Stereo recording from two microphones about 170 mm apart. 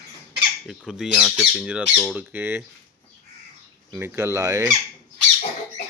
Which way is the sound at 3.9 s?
15° right (ahead or behind).